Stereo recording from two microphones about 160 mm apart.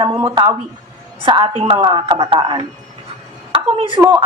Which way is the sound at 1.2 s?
35° right (ahead or behind).